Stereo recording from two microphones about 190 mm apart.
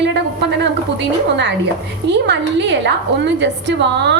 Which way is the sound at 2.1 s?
65° right (ahead or behind).